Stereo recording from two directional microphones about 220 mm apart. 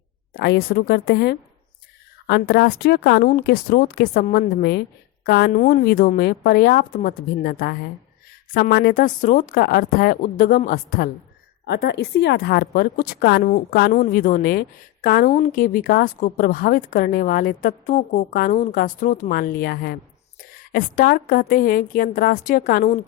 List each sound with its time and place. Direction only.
0.3 s a woman's voice: 45° left (ahead or behind)